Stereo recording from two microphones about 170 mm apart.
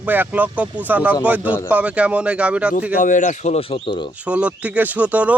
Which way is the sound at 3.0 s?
50° left (ahead or behind).